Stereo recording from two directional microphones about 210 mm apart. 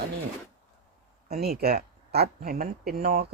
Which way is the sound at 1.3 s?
45° right (ahead or behind).